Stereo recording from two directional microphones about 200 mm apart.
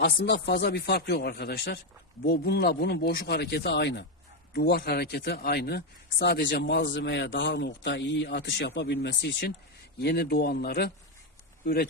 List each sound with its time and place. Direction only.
0.0 s speech: 60° left (ahead or behind)